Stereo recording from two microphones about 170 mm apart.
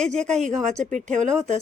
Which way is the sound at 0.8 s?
45° right (ahead or behind).